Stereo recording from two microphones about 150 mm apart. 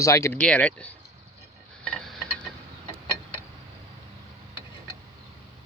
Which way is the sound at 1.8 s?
5° left (ahead or behind).